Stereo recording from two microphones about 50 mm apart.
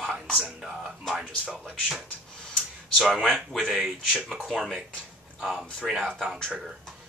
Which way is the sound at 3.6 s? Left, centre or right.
Centre.